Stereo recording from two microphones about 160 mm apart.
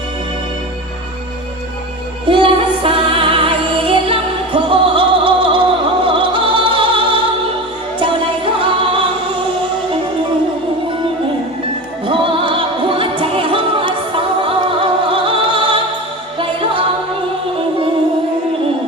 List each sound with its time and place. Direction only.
2.3 s music: 35° right (ahead or behind)
12.0 s music: 35° right (ahead or behind)